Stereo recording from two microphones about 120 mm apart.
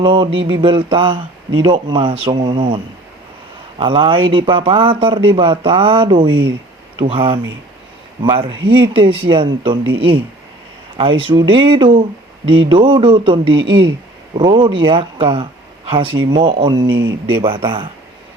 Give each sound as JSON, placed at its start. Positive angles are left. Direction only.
{"t": 0.0, "sound": "speech", "side_deg": -45}